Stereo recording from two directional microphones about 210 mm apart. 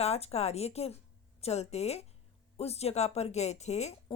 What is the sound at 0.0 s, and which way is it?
A woman's voice, 30° left (ahead or behind).